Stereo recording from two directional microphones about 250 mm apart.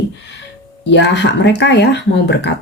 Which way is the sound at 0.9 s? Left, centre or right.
Left.